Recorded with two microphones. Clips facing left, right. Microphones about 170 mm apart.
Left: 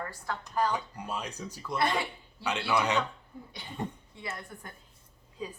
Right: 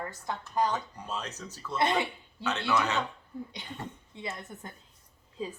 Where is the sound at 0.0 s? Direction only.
20° right (ahead or behind).